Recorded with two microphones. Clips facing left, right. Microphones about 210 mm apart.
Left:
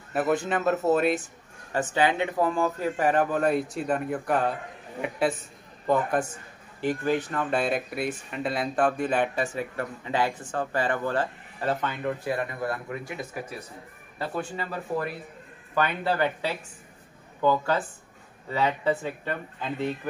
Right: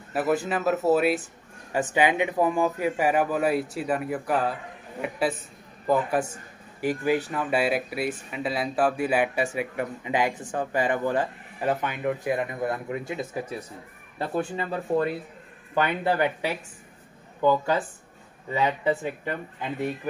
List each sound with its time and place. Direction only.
0.1 s speech: 5° right (ahead or behind)
1.7 s speech: 15° right (ahead or behind)
5.9 s speech: 5° right (ahead or behind)
14.6 s speech: 25° right (ahead or behind)